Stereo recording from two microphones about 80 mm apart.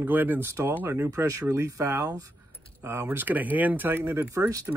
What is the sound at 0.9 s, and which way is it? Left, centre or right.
Speech, right.